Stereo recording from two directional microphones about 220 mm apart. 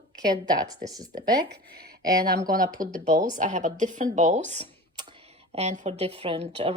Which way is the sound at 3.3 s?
35° right (ahead or behind).